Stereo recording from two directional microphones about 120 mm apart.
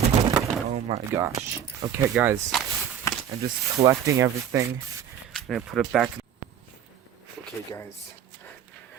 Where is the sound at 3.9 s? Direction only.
25° right (ahead or behind).